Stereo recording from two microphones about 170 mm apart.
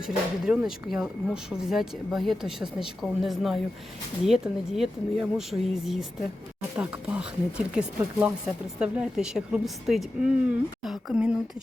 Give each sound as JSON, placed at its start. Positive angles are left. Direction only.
{"t": 0.0, "sound": "speech", "side_deg": -5}